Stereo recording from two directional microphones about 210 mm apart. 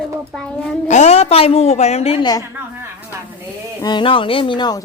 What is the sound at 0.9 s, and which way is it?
Speech, 30° left (ahead or behind).